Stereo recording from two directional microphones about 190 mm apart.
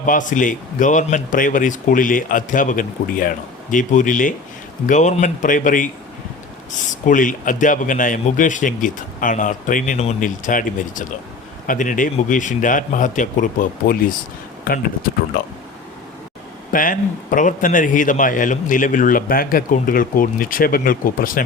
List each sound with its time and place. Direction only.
0.0 s a man's voice: 45° left (ahead or behind)
16.7 s a man's voice: 45° left (ahead or behind)